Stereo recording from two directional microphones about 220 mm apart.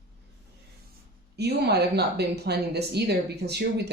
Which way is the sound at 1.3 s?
50° right (ahead or behind).